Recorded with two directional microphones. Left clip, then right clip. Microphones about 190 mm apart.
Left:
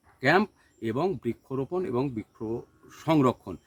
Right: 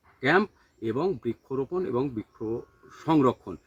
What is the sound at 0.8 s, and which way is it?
Speech, 35° left (ahead or behind).